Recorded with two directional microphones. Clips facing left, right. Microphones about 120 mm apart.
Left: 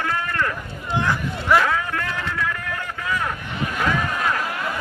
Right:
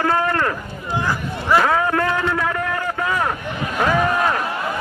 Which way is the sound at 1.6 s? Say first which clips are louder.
Right 6 dB; 40° right (ahead or behind).